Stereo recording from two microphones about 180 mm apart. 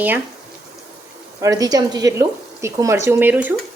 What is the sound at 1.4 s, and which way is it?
Speech, 20° right (ahead or behind).